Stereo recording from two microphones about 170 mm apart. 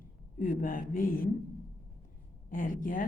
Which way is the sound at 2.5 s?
50° left (ahead or behind).